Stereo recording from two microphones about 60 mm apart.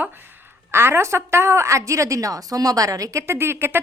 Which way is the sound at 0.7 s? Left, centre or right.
Right.